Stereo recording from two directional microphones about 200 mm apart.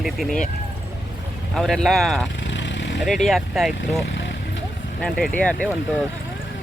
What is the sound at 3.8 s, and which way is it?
Speech, 65° left (ahead or behind).